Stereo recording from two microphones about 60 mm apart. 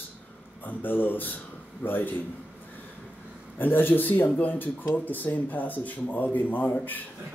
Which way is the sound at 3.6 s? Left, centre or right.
Left.